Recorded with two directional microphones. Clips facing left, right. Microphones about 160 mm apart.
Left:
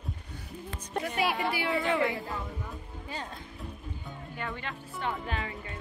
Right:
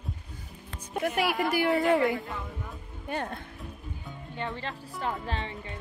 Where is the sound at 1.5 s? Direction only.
45° right (ahead or behind).